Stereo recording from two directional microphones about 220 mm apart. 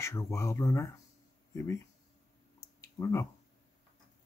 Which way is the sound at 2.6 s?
15° left (ahead or behind).